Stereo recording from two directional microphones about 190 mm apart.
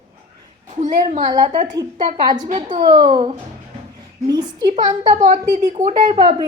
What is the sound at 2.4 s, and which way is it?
Speech, 40° right (ahead or behind).